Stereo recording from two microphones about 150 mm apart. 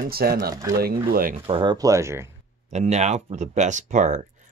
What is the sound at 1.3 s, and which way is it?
Speech, 40° right (ahead or behind).